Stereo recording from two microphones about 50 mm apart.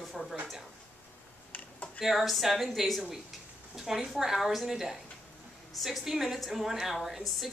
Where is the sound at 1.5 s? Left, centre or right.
Left.